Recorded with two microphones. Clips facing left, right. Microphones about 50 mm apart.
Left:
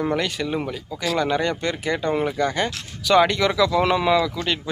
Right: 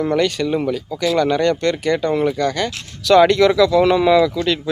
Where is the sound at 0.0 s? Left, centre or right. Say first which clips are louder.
Right 6 dB; centre.